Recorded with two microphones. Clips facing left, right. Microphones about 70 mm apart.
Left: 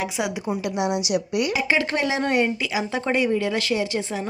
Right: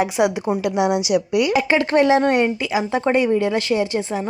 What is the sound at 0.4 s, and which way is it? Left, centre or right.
Speech, right.